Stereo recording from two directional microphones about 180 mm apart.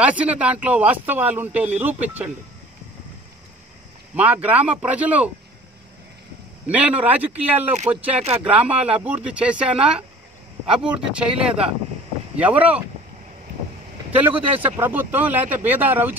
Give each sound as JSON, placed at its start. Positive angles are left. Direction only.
{"t": 0.0, "sound": "speech", "side_deg": -5}
{"t": 4.1, "sound": "speech", "side_deg": -10}
{"t": 6.7, "sound": "speech", "side_deg": -10}
{"t": 14.1, "sound": "speech", "side_deg": -10}